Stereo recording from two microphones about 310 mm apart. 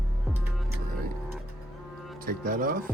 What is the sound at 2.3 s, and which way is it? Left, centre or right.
Music, right.